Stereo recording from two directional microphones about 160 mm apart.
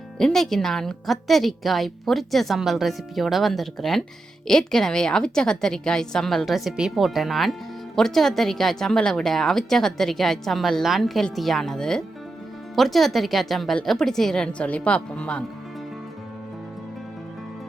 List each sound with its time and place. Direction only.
0.2 s a woman's voice: 5° left (ahead or behind)